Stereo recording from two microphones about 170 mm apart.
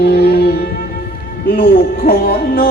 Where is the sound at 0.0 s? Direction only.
70° left (ahead or behind).